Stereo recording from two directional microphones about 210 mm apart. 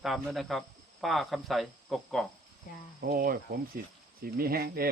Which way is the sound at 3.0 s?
45° right (ahead or behind).